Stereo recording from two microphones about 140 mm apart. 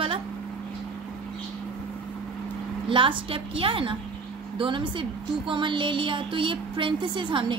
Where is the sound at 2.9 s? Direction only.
35° right (ahead or behind).